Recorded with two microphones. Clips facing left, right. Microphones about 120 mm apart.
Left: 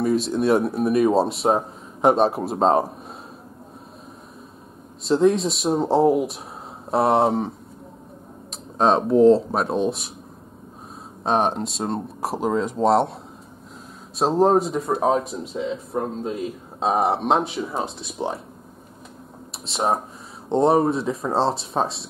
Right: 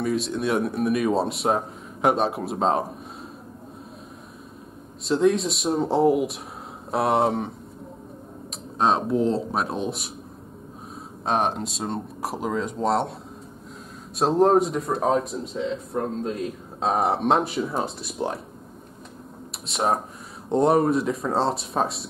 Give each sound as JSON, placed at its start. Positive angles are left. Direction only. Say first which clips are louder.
{"t": 0.0, "sound": "speech", "louder": "left 4 dB", "side_deg": 0}
{"t": 2.0, "sound": "a man's voice", "louder": "left 4 dB", "side_deg": 30}
{"t": 2.2, "sound": "speech", "louder": "left 4 dB", "side_deg": 0}
{"t": 5.0, "sound": "speech", "louder": "left 2 dB", "side_deg": 0}
{"t": 8.7, "sound": "speech", "louder": "left 4 dB", "side_deg": 0}
{"t": 11.2, "sound": "speech", "louder": "left 3 dB", "side_deg": 0}
{"t": 14.1, "sound": "speech", "louder": "left 1 dB", "side_deg": 0}
{"t": 19.7, "sound": "speech", "louder": "left 1 dB", "side_deg": 0}